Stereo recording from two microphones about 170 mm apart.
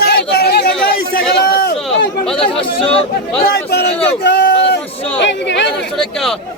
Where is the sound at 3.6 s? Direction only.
75° left (ahead or behind).